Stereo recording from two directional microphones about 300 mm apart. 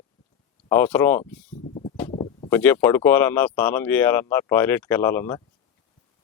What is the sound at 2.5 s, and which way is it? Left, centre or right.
A man's voice, centre.